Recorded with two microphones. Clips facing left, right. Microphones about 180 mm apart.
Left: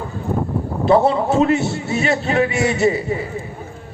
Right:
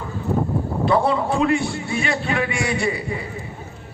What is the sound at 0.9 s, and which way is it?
A man's voice, 25° left (ahead or behind).